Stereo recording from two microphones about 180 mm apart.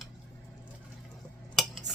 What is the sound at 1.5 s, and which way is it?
Cutlery, centre (ahead or behind).